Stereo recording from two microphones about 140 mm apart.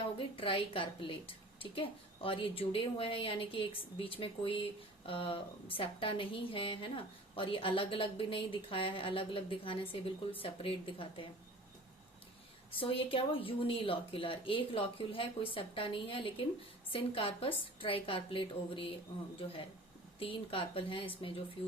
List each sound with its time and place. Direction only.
0.0 s a woman's voice: 40° left (ahead or behind)
12.8 s a woman's voice: 40° left (ahead or behind)